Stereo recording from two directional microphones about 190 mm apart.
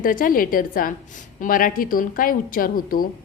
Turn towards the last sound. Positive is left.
turn(degrees=50)  # may be behind; listen again after turning